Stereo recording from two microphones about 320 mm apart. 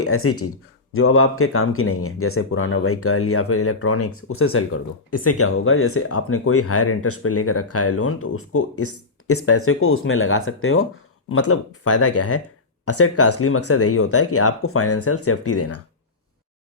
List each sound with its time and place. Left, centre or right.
0.0 s speech: left